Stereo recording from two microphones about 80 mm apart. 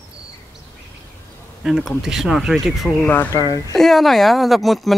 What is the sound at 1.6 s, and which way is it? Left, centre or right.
Speech, centre.